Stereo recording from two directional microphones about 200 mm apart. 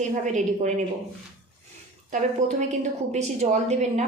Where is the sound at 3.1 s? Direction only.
35° right (ahead or behind).